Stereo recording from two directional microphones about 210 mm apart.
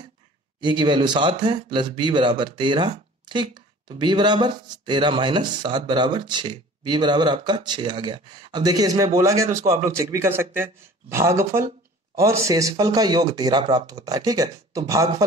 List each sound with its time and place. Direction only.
0.6 s speech: 20° right (ahead or behind)